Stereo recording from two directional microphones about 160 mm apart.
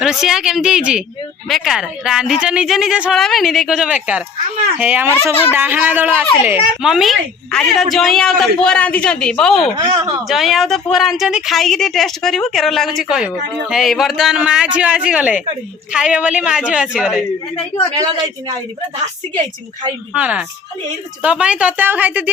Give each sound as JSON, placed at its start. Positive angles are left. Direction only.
{"t": 0.0, "sound": "a woman's voice", "side_deg": -5}
{"t": 5.3, "sound": "a man's voice", "side_deg": 15}
{"t": 5.5, "sound": "a woman's voice", "side_deg": -10}
{"t": 9.7, "sound": "a man's voice", "side_deg": -25}
{"t": 10.2, "sound": "a woman's voice", "side_deg": 0}
{"t": 18.0, "sound": "a man's voice", "side_deg": -25}
{"t": 20.1, "sound": "a woman's voice", "side_deg": -10}